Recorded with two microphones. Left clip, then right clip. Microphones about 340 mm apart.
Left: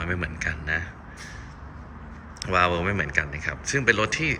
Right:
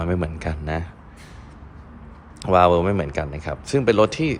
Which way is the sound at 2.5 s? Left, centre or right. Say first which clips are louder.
Right 7 dB; centre.